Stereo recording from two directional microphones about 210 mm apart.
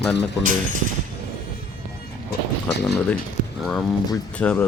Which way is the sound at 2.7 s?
55° left (ahead or behind).